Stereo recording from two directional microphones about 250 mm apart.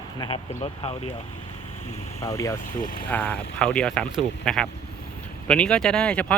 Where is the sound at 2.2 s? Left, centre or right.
Centre.